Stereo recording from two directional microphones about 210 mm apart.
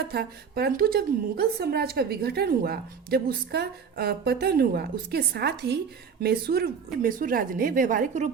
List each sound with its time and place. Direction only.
0.1 s a woman's voice: 50° right (ahead or behind)